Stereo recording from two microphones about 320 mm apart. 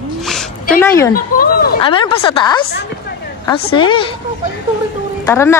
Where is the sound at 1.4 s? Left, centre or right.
Left.